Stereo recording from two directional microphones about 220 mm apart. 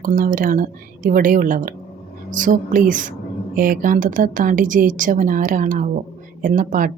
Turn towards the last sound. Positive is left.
turn(degrees=-35)  # may be behind; listen again after turning